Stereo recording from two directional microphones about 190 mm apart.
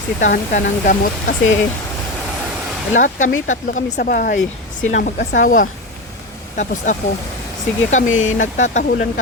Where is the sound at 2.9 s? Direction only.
40° left (ahead or behind).